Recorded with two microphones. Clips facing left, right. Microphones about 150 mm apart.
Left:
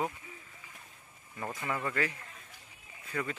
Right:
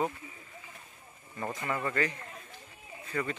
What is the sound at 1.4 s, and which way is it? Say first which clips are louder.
Speech: right 2 dB; 5° left (ahead or behind).